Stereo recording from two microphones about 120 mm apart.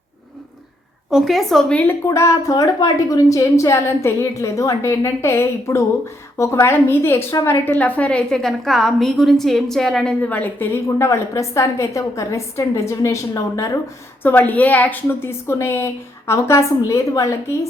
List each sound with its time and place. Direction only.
1.1 s a woman's voice: centre (ahead or behind); by 13.7 s 25° left (ahead or behind)
14.2 s a woman's voice: 15° left (ahead or behind)